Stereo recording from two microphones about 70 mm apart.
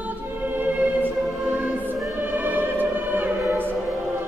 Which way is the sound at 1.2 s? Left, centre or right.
Centre.